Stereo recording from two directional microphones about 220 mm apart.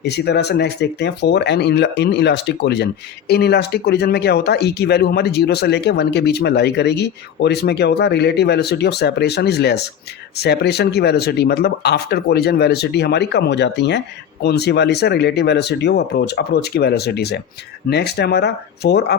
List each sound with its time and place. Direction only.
0.0 s speech: 50° left (ahead or behind)